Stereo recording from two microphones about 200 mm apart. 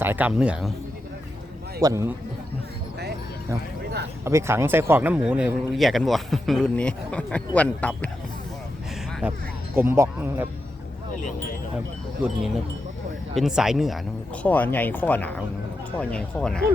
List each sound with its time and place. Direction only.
0.0 s speech: 10° right (ahead or behind)
1.8 s speech: 15° right (ahead or behind)
4.2 s speech: 15° right (ahead or behind); by 8.1 s 5° left (ahead or behind)
9.2 s speech: 5° right (ahead or behind)
13.3 s speech: centre (ahead or behind)